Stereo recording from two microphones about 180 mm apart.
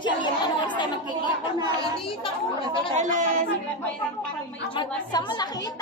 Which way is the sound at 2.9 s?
45° right (ahead or behind).